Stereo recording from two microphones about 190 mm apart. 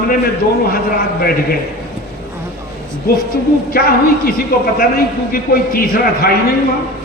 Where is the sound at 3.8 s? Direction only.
50° left (ahead or behind).